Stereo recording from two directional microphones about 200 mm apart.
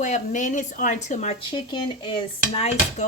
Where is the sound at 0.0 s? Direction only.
40° left (ahead or behind).